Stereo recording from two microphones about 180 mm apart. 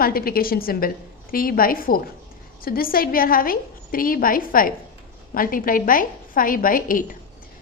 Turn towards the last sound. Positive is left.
turn(degrees=50)  # may be behind; listen again after turning